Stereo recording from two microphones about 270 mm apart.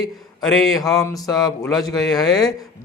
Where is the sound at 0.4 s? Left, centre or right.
Centre.